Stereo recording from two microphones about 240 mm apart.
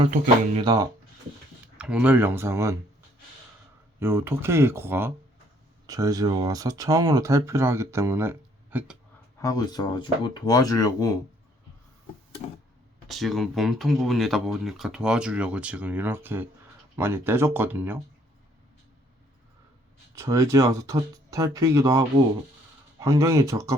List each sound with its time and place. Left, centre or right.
0.0 s speech: right
1.6 s speech: centre
4.0 s speech: centre
9.4 s speech: centre
13.1 s speech: centre
20.1 s speech: centre